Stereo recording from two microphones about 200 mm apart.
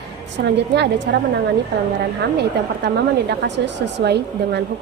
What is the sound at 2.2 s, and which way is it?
A woman's voice, 55° right (ahead or behind).